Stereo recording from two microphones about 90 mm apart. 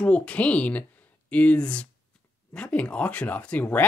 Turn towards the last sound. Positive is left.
turn(degrees=15)  # may be behind; listen again after turning